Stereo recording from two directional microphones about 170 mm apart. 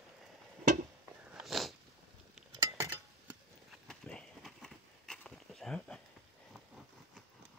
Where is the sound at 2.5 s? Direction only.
20° right (ahead or behind).